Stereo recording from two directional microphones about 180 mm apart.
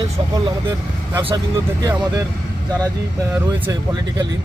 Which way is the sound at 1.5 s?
15° right (ahead or behind).